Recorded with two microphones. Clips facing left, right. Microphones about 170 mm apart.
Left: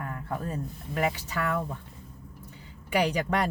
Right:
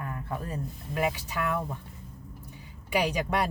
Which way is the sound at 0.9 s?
15° right (ahead or behind).